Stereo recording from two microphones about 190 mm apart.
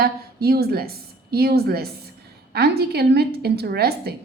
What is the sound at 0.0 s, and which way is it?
A woman's voice, 55° right (ahead or behind).